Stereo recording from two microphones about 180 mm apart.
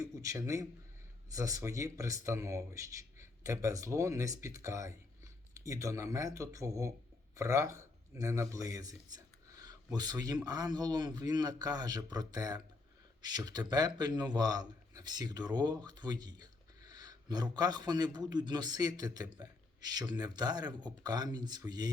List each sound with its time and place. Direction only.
0.0 s a man's voice: 20° right (ahead or behind)